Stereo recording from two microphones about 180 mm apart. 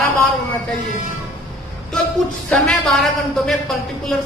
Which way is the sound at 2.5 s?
5° left (ahead or behind).